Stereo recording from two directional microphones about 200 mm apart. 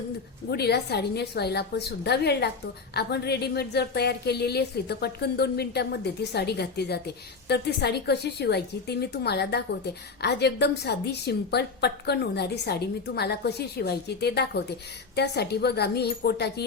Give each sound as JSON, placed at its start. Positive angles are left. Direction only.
{"t": 0.5, "sound": "speech", "side_deg": 55}